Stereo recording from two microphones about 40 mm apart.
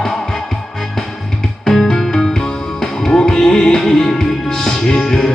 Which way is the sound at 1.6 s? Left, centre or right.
Centre.